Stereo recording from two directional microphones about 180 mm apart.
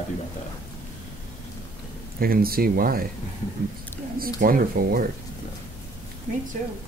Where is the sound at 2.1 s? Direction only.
55° right (ahead or behind).